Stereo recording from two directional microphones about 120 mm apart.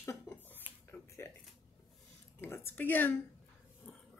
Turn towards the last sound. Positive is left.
turn(degrees=15)  # may be behind; listen again after turning